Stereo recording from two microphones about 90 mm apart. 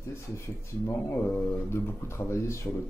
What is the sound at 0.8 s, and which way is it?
Speech, 25° left (ahead or behind).